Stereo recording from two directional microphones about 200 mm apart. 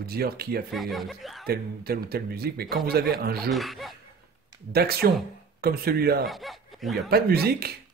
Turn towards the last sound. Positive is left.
turn(degrees=-50)  # may be behind; listen again after turning